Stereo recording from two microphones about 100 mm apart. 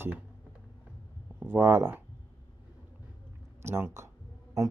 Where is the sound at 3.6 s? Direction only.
25° right (ahead or behind).